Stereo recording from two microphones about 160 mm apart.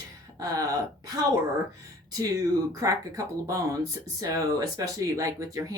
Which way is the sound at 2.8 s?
20° right (ahead or behind).